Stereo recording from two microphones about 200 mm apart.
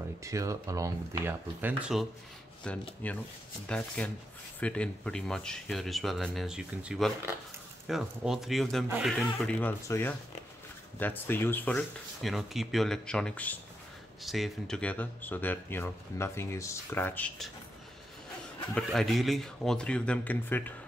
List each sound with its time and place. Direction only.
0.2 s speech: 15° right (ahead or behind); by 17.5 s 10° left (ahead or behind)
18.8 s speech: centre (ahead or behind)